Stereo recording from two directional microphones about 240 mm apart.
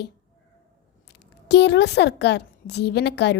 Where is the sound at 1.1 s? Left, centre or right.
Left.